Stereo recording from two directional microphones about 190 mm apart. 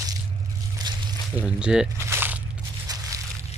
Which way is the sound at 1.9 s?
15° right (ahead or behind).